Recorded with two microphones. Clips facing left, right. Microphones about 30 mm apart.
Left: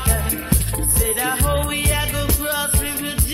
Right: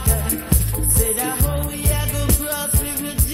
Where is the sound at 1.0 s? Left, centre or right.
Left.